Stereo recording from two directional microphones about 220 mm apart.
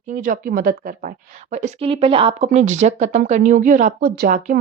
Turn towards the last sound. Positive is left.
turn(degrees=-40)  # may be behind; listen again after turning